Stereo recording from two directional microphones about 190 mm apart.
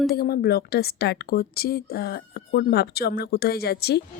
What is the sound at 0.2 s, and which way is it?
A woman's voice, 55° left (ahead or behind).